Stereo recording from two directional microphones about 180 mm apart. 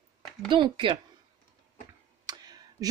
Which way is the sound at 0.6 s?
30° right (ahead or behind).